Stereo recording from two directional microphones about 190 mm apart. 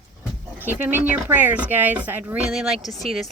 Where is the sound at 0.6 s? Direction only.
10° right (ahead or behind).